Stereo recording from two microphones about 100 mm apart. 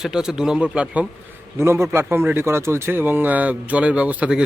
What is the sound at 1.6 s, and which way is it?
A man's voice, 25° right (ahead or behind).